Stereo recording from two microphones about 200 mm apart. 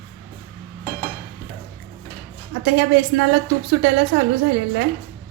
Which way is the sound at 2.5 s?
65° right (ahead or behind).